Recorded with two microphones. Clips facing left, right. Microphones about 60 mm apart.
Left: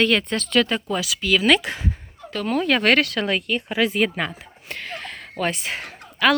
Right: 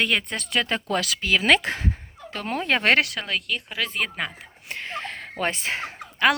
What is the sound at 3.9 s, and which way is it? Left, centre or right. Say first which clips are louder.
Speech: left 6 dB; centre.